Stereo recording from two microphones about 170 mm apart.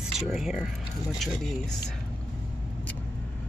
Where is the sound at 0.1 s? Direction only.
Centre (ahead or behind).